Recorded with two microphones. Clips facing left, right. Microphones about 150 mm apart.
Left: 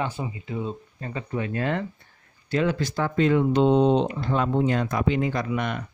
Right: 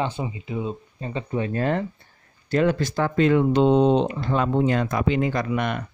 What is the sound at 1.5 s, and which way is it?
Speech, 40° right (ahead or behind).